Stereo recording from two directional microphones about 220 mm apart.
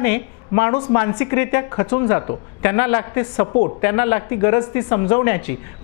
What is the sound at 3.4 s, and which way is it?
A woman's voice, 30° left (ahead or behind).